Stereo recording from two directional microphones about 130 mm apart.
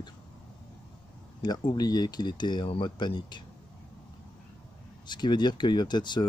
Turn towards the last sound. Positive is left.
turn(degrees=35)  # may be behind; listen again after turning